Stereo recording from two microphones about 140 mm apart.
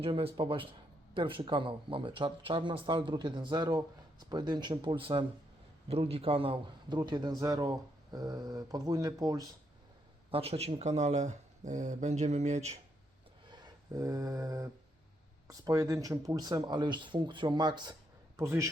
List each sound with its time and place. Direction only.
0.0 s a man's voice: 40° right (ahead or behind); by 9.5 s 25° right (ahead or behind)
10.3 s speech: 45° right (ahead or behind)
13.5 s a sound: 30° right (ahead or behind)
15.4 s speech: 25° right (ahead or behind)
18.3 s a man's voice: 20° right (ahead or behind)